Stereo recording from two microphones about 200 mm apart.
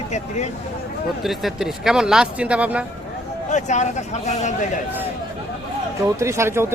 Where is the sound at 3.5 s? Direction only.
35° left (ahead or behind).